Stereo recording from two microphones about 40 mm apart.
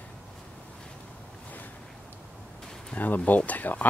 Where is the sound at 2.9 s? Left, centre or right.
Left.